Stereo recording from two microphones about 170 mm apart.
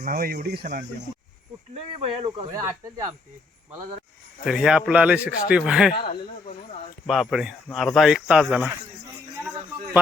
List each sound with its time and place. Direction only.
0.0 s speech: 60° right (ahead or behind)
1.7 s speech: 35° right (ahead or behind)
4.4 s a man's voice: 5° right (ahead or behind)
5.9 s speech: 65° left (ahead or behind)
7.1 s a man's voice: centre (ahead or behind)